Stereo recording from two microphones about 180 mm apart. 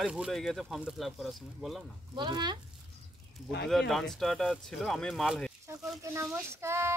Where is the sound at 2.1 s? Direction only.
25° right (ahead or behind).